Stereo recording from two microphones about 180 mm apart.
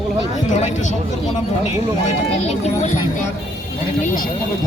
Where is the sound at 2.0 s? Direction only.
40° left (ahead or behind).